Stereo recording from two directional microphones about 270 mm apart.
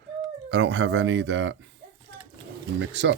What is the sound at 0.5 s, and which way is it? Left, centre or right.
Speech, right.